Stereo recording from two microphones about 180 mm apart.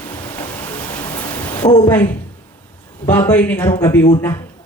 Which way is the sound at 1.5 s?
25° left (ahead or behind).